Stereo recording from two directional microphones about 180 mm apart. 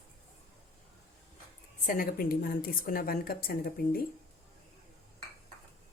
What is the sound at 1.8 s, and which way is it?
A woman's voice, 50° left (ahead or behind).